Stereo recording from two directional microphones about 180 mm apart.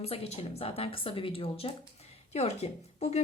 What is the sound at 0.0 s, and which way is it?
A woman's voice, 35° left (ahead or behind).